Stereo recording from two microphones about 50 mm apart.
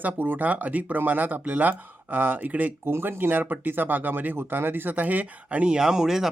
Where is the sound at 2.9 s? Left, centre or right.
Right.